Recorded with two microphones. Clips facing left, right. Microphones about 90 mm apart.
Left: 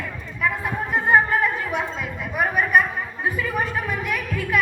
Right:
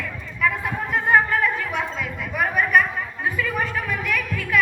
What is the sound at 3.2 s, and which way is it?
Music, 25° left (ahead or behind).